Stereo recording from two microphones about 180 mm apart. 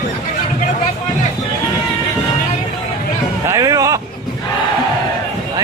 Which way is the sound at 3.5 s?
20° right (ahead or behind).